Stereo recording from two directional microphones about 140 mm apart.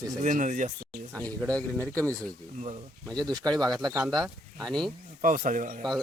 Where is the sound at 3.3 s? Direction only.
30° right (ahead or behind).